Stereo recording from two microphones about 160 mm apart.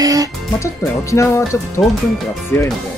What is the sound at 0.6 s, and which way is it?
Speech, 20° left (ahead or behind).